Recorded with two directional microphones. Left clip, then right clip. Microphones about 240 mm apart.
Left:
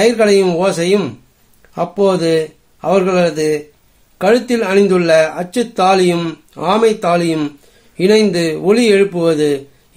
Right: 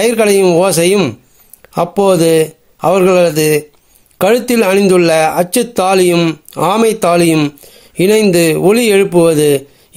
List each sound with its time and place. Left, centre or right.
0.0 s a man's voice: right